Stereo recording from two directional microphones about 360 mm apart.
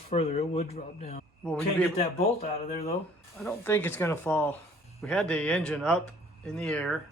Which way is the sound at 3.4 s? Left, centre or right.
Centre.